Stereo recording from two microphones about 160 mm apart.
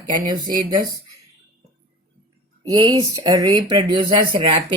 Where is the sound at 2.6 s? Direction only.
25° right (ahead or behind).